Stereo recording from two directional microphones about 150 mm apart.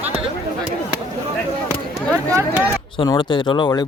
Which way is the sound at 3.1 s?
35° left (ahead or behind).